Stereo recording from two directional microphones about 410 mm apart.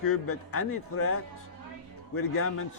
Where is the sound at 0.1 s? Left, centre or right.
Left.